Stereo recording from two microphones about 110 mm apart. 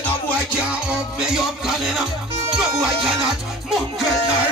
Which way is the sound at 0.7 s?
5° right (ahead or behind).